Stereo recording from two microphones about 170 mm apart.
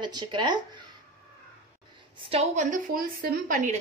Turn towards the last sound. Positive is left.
turn(degrees=-50)  # may be behind; listen again after turning